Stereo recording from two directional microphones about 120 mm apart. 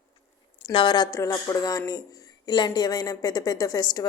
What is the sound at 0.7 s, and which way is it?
Speech, 40° left (ahead or behind).